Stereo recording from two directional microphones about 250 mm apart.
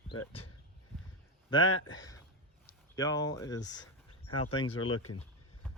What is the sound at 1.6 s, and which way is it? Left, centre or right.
Speech, left.